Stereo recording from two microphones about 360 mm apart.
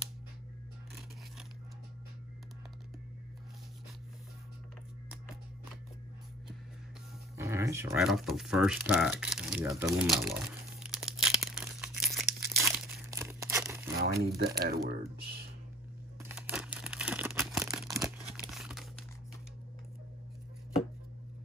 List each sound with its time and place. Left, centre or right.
7.3 s a sound: centre
13.9 s speech: right
16.2 s crumpling: centre